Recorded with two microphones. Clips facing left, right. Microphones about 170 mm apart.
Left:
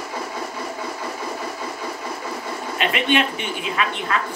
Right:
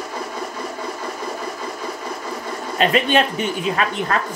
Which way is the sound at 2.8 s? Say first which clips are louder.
Right 4 dB; 40° right (ahead or behind).